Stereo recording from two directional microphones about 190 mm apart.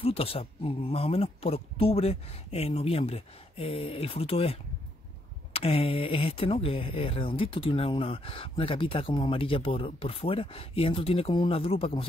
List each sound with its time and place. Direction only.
0.0 s speech: 30° left (ahead or behind)